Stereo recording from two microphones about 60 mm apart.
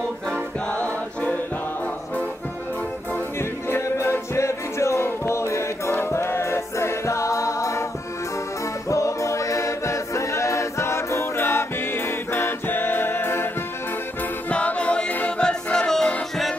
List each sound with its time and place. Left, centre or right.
0.7 s music: left
3.3 s music: left
8.8 s choir: left
14.5 s choir: left
15.4 s music: centre